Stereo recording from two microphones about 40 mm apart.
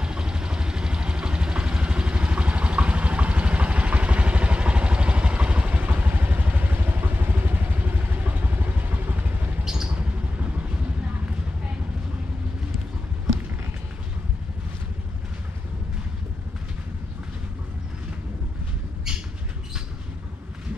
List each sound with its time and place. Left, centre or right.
0.0 s vehicle: right